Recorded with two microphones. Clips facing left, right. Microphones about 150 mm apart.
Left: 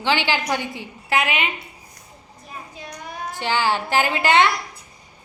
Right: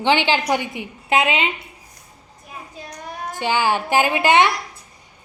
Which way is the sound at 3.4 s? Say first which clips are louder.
Right 2 dB; 15° right (ahead or behind).